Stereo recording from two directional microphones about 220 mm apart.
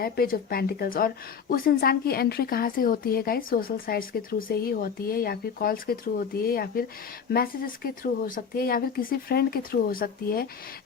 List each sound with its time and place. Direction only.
0.0 s a woman's voice: 45° left (ahead or behind)